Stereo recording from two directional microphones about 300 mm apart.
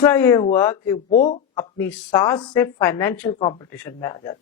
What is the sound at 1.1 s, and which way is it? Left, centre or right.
Speech, left.